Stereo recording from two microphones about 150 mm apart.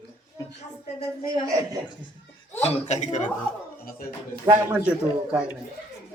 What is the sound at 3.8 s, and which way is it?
Speech, 80° left.